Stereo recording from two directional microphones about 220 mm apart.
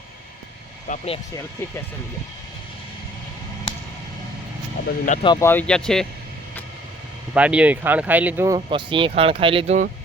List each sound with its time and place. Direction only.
0.9 s speech: 25° left (ahead or behind)
4.9 s speech: 35° left (ahead or behind)
5.2 s speech: 15° left (ahead or behind)
7.3 s speech: 5° right (ahead or behind)
8.5 s speech: 20° right (ahead or behind)